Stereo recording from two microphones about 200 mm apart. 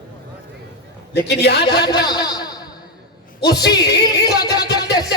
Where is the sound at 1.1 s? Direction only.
55° left (ahead or behind).